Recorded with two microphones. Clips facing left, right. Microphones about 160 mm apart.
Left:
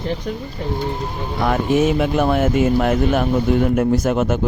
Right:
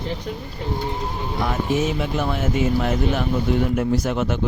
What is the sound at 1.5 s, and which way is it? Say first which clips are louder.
Speech: left 7 dB; 60° left (ahead or behind).